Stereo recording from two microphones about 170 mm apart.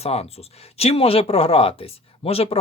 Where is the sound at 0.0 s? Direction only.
35° left (ahead or behind).